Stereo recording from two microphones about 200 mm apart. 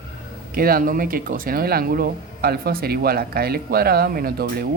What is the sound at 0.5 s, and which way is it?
Speech, 45° right (ahead or behind).